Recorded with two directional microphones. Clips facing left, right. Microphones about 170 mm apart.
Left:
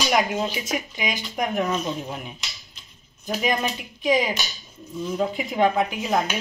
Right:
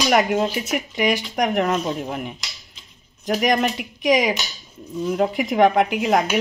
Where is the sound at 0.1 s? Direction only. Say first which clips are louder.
Right 5 dB; 60° right (ahead or behind).